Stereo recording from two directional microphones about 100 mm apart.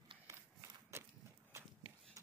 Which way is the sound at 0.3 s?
30° right (ahead or behind).